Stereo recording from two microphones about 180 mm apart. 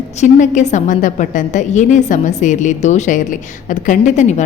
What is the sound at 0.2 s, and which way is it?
A woman's voice, 40° left (ahead or behind).